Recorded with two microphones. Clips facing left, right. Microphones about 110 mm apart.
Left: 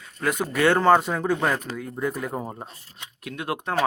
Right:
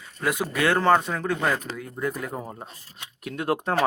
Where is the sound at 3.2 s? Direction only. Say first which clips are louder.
Right 4 dB; 35° right (ahead or behind).